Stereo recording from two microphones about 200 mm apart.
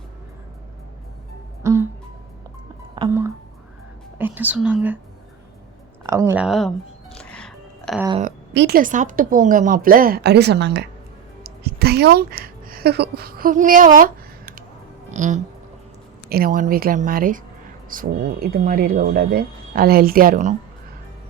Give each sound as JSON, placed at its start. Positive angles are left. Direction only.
{"t": 1.6, "sound": "music", "side_deg": -15}
{"t": 3.1, "sound": "speech", "side_deg": -15}
{"t": 6.0, "sound": "music", "side_deg": -15}
{"t": 8.5, "sound": "speech", "side_deg": -50}
{"t": 11.4, "sound": "a sound", "side_deg": -50}
{"t": 16.3, "sound": "speech", "side_deg": -45}